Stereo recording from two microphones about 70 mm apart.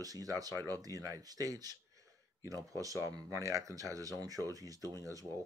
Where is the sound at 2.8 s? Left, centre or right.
Right.